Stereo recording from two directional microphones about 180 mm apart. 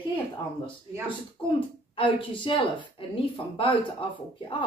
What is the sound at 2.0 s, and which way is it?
A woman's voice, 30° left (ahead or behind).